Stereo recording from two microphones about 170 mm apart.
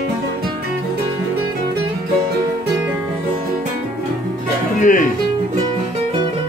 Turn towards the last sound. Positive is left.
turn(degrees=50)  # may be behind; listen again after turning